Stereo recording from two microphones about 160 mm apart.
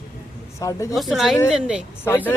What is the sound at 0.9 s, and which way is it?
Speech, centre (ahead or behind).